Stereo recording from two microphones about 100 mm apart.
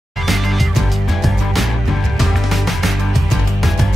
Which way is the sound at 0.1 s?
Centre (ahead or behind).